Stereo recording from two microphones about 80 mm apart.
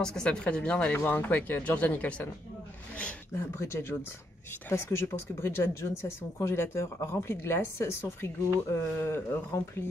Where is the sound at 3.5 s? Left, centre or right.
Left.